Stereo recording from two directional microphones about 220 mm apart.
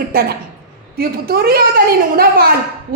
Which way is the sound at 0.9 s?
45° right (ahead or behind).